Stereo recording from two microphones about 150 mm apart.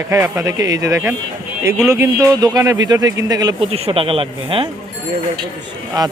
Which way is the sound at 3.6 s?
40° right (ahead or behind).